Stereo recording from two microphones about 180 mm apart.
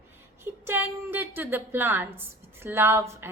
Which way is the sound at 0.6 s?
10° right (ahead or behind).